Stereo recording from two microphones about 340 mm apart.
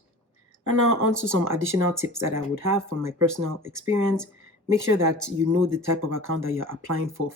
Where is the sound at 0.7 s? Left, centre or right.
Right.